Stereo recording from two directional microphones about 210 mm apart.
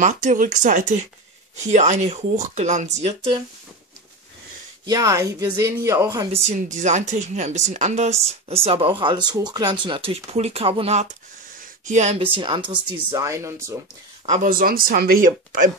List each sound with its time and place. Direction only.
0.0 s speech: 35° right (ahead or behind)
4.8 s speech: 15° right (ahead or behind)
6.3 s speech: 35° right (ahead or behind); by 13.7 s 15° right (ahead or behind)
14.2 s speech: 35° right (ahead or behind)